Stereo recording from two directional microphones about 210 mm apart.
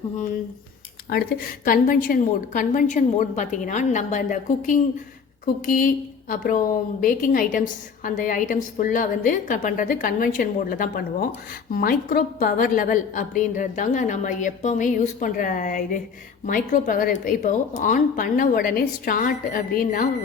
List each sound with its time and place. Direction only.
1.1 s a woman's voice: 45° left (ahead or behind)